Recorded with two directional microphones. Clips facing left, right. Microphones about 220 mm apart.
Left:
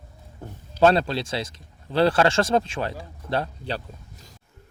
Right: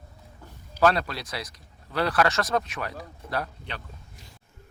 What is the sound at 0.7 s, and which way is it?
Speech, 25° left (ahead or behind).